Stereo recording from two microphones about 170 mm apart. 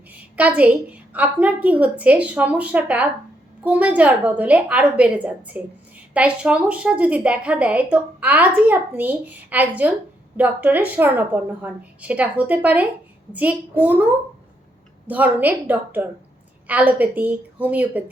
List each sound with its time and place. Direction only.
0.1 s a woman's voice: 10° right (ahead or behind)